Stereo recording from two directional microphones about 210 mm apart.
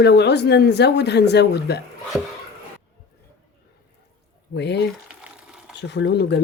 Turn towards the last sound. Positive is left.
turn(degrees=55)  # may be behind; listen again after turning